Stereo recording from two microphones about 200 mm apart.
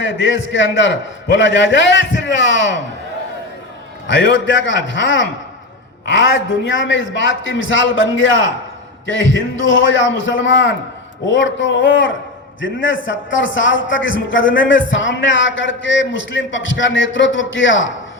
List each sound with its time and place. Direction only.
0.0 s a man's voice: 65° left (ahead or behind)
4.0 s a man's voice: 65° left (ahead or behind)